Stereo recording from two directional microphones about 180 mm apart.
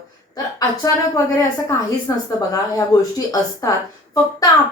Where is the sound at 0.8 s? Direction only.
20° left (ahead or behind).